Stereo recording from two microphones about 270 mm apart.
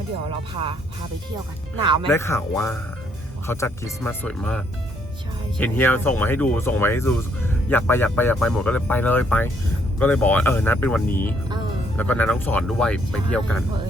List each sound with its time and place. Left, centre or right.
1.8 s speech: centre
2.0 s speech: centre